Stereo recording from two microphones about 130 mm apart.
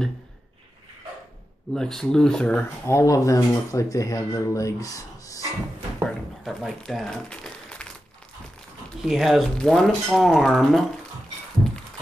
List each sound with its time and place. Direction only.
1.7 s speech: 5° left (ahead or behind)
2.9 s speech: 25° left (ahead or behind)
6.0 s crumpling: 5° left (ahead or behind)
9.0 s speech: centre (ahead or behind)